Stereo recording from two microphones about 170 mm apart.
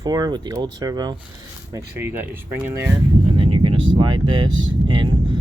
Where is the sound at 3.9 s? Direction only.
30° right (ahead or behind).